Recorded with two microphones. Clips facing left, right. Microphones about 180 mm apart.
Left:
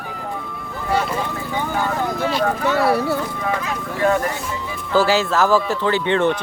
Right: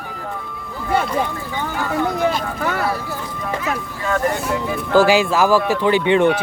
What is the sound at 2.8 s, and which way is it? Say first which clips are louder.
Speech: left 5 dB; 70° left (ahead or behind).